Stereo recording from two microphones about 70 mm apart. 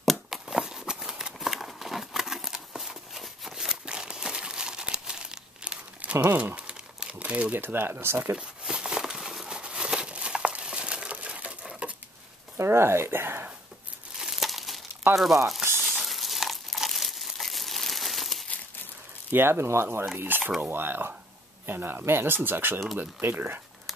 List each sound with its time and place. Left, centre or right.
0.0 s a sound: centre
6.5 s crumpling: centre
7.5 s speech: right
8.4 s crumpling: centre
12.5 s speech: right
14.1 s crumpling: centre
15.1 s sizzle: centre
15.8 s crumpling: centre
19.3 s speech: right